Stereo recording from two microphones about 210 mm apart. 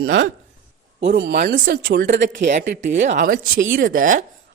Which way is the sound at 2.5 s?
35° right (ahead or behind).